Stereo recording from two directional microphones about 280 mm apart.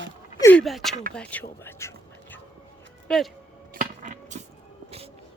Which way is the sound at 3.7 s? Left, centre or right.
Right.